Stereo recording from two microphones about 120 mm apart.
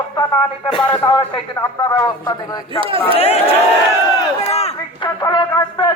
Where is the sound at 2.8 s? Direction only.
50° right (ahead or behind).